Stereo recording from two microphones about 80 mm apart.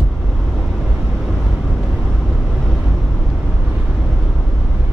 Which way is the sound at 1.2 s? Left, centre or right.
Centre.